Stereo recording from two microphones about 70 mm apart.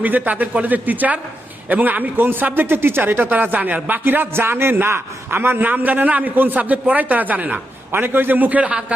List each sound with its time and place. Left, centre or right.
0.0 s a man's voice: right